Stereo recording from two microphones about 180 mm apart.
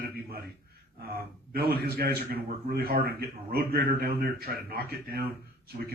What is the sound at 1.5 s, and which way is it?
A man's voice, 55° right (ahead or behind).